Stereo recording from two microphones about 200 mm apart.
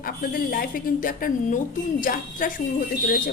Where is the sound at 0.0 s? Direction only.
45° left (ahead or behind).